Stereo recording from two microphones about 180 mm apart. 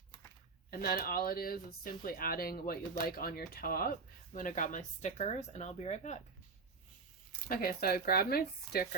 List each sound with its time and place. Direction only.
0.7 s speech: 55° left (ahead or behind); by 6.1 s 40° left (ahead or behind)
7.4 s speech: 55° left (ahead or behind)